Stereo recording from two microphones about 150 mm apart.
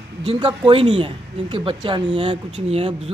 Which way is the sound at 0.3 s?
35° right (ahead or behind).